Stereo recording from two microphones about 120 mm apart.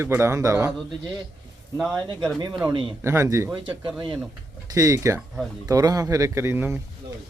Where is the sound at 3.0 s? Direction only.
25° right (ahead or behind).